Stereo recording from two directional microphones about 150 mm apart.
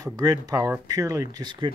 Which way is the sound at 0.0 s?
25° right (ahead or behind).